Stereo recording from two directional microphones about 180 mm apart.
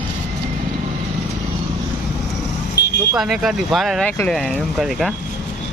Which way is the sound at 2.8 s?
65° left (ahead or behind).